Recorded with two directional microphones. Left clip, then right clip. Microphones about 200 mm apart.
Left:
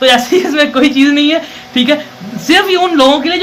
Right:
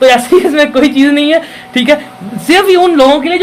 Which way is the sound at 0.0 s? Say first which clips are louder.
Right 3 dB; 35° right (ahead or behind).